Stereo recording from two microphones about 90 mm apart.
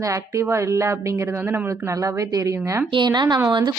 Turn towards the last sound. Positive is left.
turn(degrees=-55)  # may be behind; listen again after turning